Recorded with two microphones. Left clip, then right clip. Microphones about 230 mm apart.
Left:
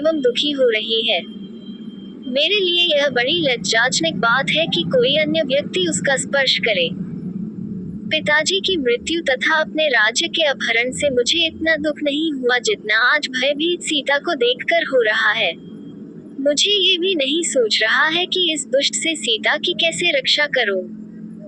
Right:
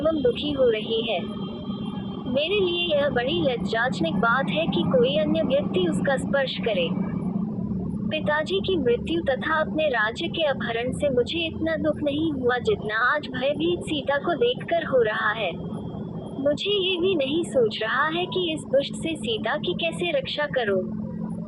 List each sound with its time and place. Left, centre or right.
0.3 s a woman's voice: left
2.3 s a woman's voice: left
8.1 s a woman's voice: left